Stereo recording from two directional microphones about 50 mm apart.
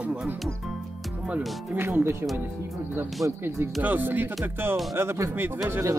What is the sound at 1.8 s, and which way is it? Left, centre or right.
Speech, right.